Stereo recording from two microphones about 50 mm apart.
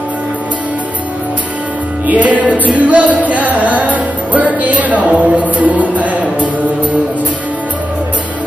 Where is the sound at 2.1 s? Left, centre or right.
Right.